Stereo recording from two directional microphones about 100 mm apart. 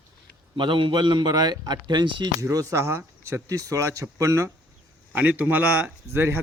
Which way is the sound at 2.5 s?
30° right (ahead or behind).